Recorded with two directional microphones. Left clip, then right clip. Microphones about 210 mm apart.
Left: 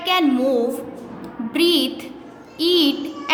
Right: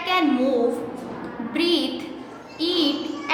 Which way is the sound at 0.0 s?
35° left (ahead or behind).